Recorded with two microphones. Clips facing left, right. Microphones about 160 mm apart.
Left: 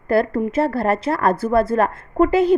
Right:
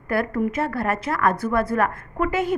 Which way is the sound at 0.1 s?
30° left (ahead or behind).